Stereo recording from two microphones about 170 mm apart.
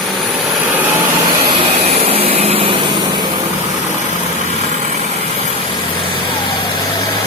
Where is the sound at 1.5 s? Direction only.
35° right (ahead or behind).